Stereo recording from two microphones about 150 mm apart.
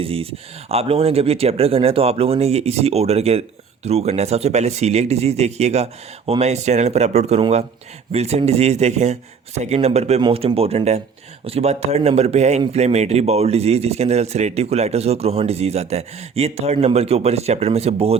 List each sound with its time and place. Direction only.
0.0 s speech: 40° right (ahead or behind)